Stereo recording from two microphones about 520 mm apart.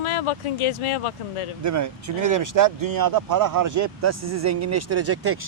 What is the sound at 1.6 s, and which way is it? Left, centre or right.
Speech, right.